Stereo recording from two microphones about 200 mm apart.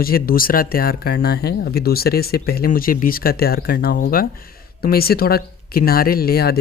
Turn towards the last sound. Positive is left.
turn(degrees=50)  # may be behind; listen again after turning